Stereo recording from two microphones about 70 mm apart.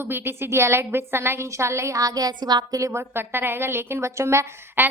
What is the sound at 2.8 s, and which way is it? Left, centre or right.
A woman's voice, right.